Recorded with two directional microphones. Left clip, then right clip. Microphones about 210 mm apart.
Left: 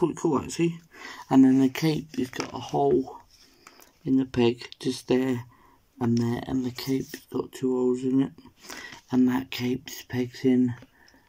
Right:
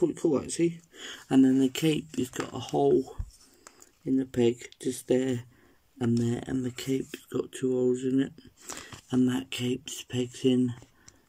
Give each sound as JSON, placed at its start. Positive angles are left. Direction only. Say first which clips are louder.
{"t": 0.0, "sound": "speech", "louder": "left 1 dB", "side_deg": 40}
{"t": 0.7, "sound": "speech", "louder": "even", "side_deg": -10}
{"t": 4.0, "sound": "speech", "louder": "left 2 dB", "side_deg": -10}